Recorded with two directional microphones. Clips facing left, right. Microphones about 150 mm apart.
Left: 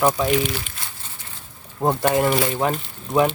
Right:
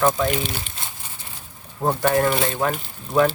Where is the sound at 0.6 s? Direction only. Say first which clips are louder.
Right 1 dB; 25° right (ahead or behind).